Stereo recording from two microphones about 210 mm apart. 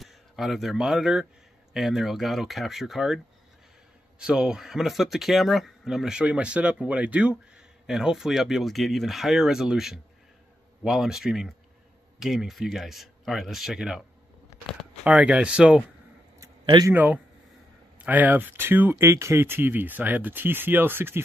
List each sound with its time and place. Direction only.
0.0 s speech: centre (ahead or behind)
4.2 s speech: 5° right (ahead or behind)
15.0 s speech: 5° right (ahead or behind)
16.3 s a sound: 20° right (ahead or behind)
16.9 s speech: 10° right (ahead or behind)